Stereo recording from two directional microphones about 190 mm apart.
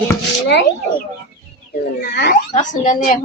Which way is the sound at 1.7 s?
60° left (ahead or behind).